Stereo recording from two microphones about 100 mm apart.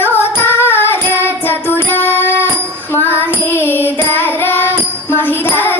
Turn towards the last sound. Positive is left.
turn(degrees=20)  # may be behind; listen again after turning